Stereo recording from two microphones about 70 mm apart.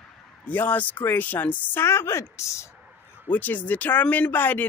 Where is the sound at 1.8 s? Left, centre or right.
Left.